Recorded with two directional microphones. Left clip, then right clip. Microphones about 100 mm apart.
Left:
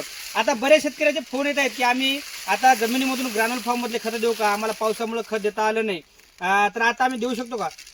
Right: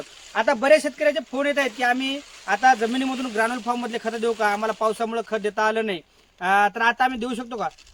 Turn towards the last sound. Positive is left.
turn(degrees=20)  # may be behind; listen again after turning